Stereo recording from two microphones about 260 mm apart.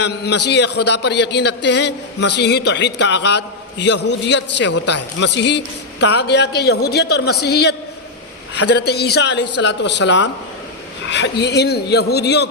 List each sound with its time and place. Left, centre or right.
0.4 s a man's voice: left